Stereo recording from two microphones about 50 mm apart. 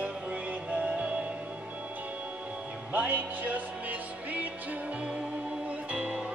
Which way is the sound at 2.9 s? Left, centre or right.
Right.